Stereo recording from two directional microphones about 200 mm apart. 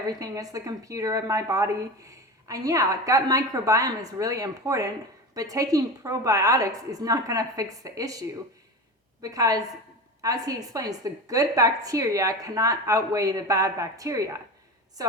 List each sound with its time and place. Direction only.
0.2 s speech: 15° right (ahead or behind)
9.2 s speech: 15° right (ahead or behind)